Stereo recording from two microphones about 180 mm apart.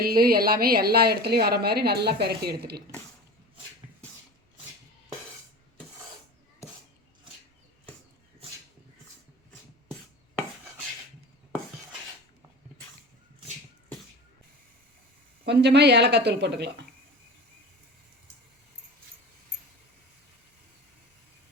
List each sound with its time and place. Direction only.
0.0 s a woman's voice: 55° right (ahead or behind)
15.4 s speech: 70° right (ahead or behind)